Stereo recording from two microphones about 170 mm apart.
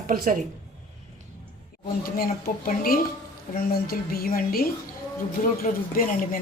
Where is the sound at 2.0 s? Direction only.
60° left (ahead or behind).